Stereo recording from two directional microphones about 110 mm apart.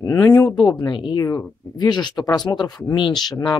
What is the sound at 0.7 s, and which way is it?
Speech, 40° left (ahead or behind).